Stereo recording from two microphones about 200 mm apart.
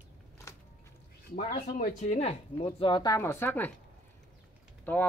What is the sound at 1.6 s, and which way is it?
Speech, 40° left (ahead or behind).